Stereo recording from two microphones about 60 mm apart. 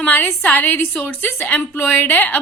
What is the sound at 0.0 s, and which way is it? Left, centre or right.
A woman's voice, left.